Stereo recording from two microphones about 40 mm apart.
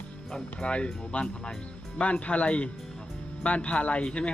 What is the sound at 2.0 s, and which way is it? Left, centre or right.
Speech, left.